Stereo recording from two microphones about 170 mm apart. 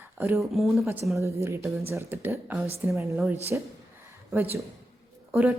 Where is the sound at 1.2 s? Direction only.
15° right (ahead or behind).